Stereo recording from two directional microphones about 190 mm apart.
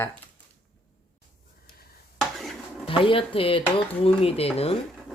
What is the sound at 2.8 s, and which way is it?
Speech, 30° left (ahead or behind).